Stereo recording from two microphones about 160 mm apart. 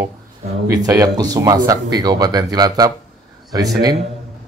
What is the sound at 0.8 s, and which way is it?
A man's voice, 20° right (ahead or behind).